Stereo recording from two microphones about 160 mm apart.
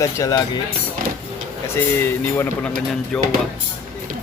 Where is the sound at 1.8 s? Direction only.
15° left (ahead or behind).